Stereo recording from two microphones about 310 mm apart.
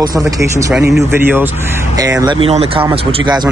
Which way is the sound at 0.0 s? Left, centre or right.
Centre.